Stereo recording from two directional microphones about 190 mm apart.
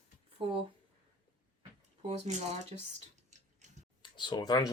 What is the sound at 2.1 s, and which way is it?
Speech, 35° right (ahead or behind).